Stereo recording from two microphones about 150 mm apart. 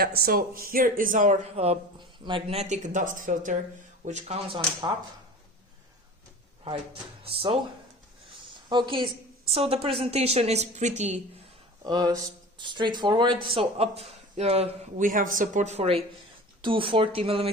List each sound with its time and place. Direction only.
0.0 s speech: 85° right; by 3.5 s 60° right (ahead or behind)
4.0 s a woman's voice: 50° right (ahead or behind)
7.3 s speech: 40° right (ahead or behind)
8.7 s a woman's voice: 35° right (ahead or behind); by 11.2 s 50° right (ahead or behind)
11.8 s speech: 25° right (ahead or behind); by 16.0 s 45° right (ahead or behind)
16.6 s speech: 35° right (ahead or behind)